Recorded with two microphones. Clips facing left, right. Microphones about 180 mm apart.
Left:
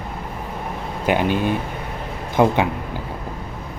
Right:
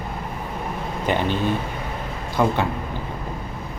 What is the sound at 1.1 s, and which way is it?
A man's voice, 10° left (ahead or behind).